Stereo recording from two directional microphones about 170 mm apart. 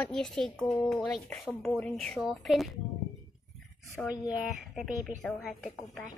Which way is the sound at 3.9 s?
20° left (ahead or behind).